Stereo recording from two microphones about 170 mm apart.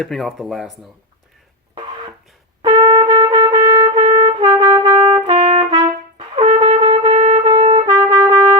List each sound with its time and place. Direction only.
0.0 s speech: centre (ahead or behind)
1.7 s a sound: 30° right (ahead or behind)
2.6 s trumpet: 25° right (ahead or behind)
6.5 s music: 30° right (ahead or behind)
7.3 s trumpet: 30° right (ahead or behind)